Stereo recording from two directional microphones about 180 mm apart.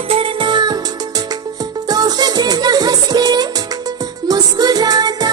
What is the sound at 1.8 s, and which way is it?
Music, 20° right (ahead or behind).